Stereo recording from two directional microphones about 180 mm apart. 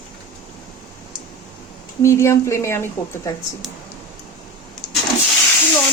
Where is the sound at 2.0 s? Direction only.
15° left (ahead or behind).